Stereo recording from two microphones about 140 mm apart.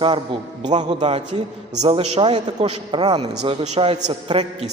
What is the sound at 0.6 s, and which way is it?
Speech, 55° right (ahead or behind).